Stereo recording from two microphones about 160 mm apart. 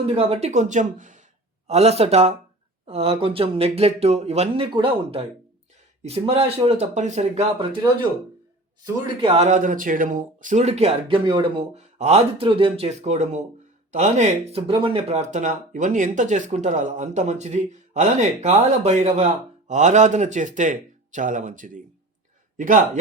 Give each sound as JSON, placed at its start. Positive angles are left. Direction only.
{"t": 0.0, "sound": "speech", "side_deg": -40}
{"t": 1.6, "sound": "speech", "side_deg": -40}
{"t": 9.0, "sound": "speech", "side_deg": -35}
{"t": 9.5, "sound": "speech", "side_deg": -55}
{"t": 11.3, "sound": "a man's voice", "side_deg": -30}